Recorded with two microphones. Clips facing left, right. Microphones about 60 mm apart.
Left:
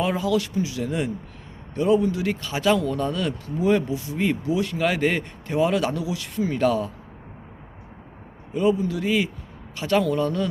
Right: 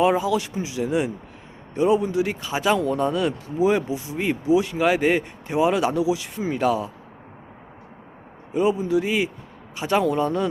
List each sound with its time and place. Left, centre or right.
0.0 s speech: centre
8.5 s speech: centre